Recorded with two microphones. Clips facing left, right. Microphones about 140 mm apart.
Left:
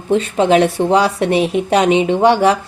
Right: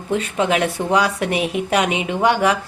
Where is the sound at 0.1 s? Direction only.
30° left (ahead or behind).